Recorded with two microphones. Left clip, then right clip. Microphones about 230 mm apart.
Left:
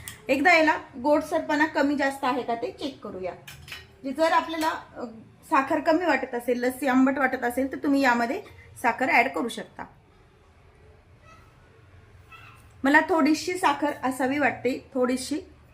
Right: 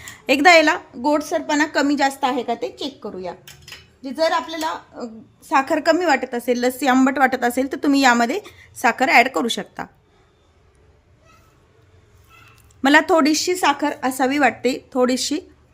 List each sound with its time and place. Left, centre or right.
0.3 s a woman's voice: right
12.8 s a woman's voice: right